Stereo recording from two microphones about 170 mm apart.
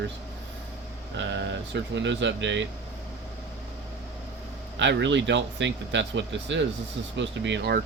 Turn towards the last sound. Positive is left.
turn(degrees=-80)